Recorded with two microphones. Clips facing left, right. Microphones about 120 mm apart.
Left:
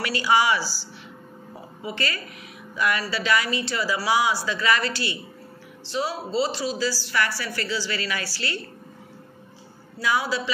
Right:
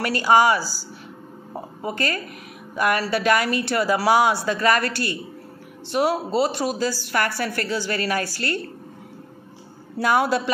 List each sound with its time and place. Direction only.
0.0 s a woman's voice: 45° right (ahead or behind)
1.5 s a sound: 50° right (ahead or behind)
2.7 s a woman's voice: 50° right (ahead or behind)
9.9 s a woman's voice: 55° right (ahead or behind)